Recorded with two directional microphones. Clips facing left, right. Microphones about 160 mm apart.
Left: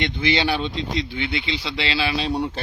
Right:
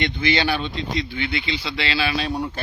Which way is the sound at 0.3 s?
20° left (ahead or behind).